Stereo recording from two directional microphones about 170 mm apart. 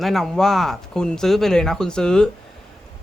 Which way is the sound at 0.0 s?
Centre (ahead or behind).